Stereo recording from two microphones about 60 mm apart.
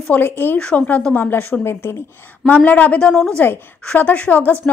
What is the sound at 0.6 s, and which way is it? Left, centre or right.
A woman's voice, left.